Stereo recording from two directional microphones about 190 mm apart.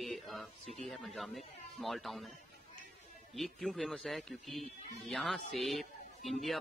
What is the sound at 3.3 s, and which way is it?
A man's voice, centre (ahead or behind).